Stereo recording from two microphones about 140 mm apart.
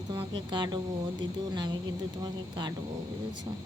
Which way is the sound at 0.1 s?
35° right (ahead or behind).